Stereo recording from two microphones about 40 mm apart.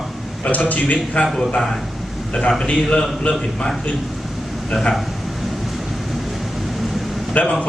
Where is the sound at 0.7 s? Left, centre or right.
Left.